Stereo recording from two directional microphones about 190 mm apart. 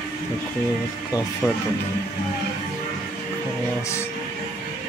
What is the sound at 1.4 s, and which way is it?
Speech, 10° left (ahead or behind).